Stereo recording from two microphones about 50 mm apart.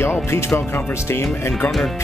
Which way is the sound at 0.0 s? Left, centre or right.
Left.